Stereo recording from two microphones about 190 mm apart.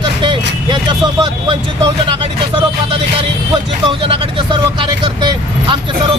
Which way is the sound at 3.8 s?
25° right (ahead or behind).